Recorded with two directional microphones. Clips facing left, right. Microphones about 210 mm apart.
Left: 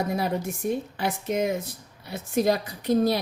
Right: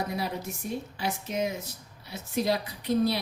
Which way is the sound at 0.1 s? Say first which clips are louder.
Left 6 dB; 50° left (ahead or behind).